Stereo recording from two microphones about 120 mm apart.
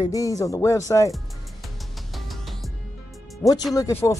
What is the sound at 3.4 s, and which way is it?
Speech, 30° left (ahead or behind).